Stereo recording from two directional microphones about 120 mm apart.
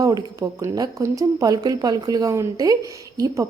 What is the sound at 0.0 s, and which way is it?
A woman's voice, 30° right (ahead or behind).